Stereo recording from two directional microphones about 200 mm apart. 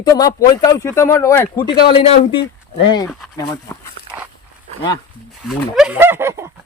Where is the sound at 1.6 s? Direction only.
25° left (ahead or behind).